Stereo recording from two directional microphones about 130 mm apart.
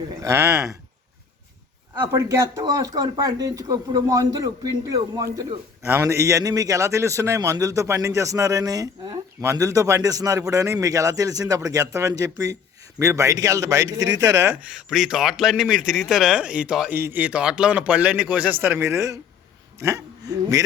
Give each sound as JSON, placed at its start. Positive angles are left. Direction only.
{"t": 0.2, "sound": "speech", "side_deg": -20}
{"t": 2.0, "sound": "speech", "side_deg": -20}
{"t": 14.5, "sound": "a man's voice", "side_deg": -10}